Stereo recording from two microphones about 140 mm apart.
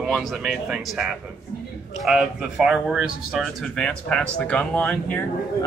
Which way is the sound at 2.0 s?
5° right (ahead or behind).